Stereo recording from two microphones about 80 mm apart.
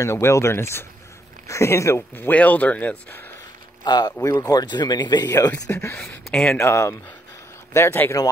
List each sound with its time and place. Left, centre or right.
0.0 s speech: left
3.8 s speech: left
4.2 s speech: left
4.6 s speech: left
5.7 s speech: left
5.9 s speech: centre
6.5 s speech: left